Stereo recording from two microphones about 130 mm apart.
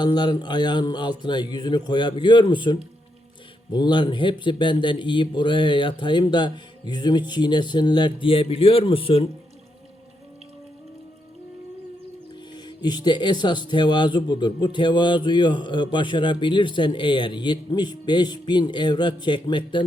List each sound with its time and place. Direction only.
0.0 s speech: 35° left (ahead or behind)
12.3 s speech: 35° left (ahead or behind)